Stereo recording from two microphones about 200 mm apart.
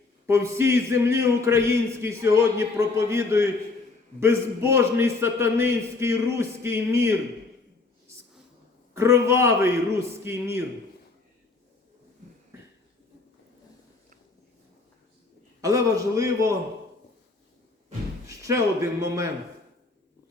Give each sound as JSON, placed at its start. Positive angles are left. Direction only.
{"t": 0.3, "sound": "a man's voice", "side_deg": -15}
{"t": 9.0, "sound": "a man's voice", "side_deg": -15}
{"t": 15.6, "sound": "a man's voice", "side_deg": -15}
{"t": 18.3, "sound": "a man's voice", "side_deg": -15}